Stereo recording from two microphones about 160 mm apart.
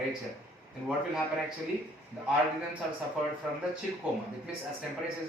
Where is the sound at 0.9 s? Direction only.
5° right (ahead or behind).